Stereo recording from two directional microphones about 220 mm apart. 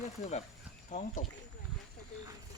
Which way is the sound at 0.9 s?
35° left (ahead or behind).